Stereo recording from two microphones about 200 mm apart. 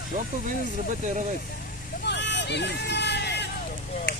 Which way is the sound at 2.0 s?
60° left (ahead or behind).